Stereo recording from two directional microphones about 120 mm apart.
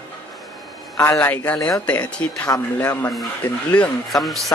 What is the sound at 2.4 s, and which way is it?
Speech, 25° left (ahead or behind).